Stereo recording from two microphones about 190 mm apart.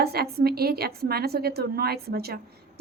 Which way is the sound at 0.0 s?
55° right (ahead or behind).